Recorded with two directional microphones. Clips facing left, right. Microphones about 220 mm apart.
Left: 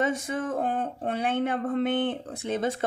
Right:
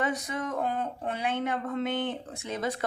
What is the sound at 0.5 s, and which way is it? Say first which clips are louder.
Speech: left 2 dB; 30° left (ahead or behind).